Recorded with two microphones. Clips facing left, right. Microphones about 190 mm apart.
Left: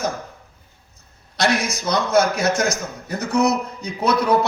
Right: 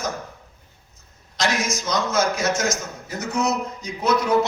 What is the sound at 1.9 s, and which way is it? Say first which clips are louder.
Speech: left 5 dB; 60° left (ahead or behind).